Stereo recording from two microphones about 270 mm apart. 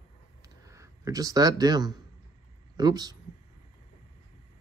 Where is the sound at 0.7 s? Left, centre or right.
Centre.